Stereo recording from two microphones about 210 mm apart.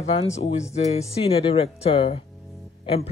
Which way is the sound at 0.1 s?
30° left (ahead or behind).